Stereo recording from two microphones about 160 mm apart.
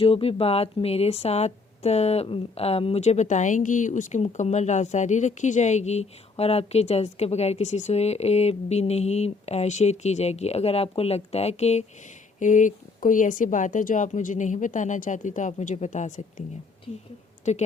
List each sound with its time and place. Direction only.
0.0 s a woman's voice: 35° left (ahead or behind)
17.5 s a woman's voice: 45° left (ahead or behind)